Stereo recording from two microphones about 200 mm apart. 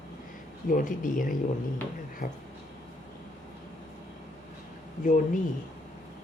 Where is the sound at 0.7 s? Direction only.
40° left (ahead or behind).